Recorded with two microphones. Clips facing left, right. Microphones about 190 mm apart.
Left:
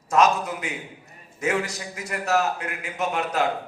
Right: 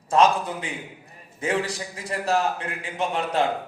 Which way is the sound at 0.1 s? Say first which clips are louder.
Right 1 dB; 30° right (ahead or behind).